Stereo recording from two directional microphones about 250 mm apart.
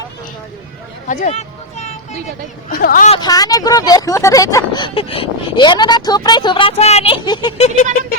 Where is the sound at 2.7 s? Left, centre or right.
Left.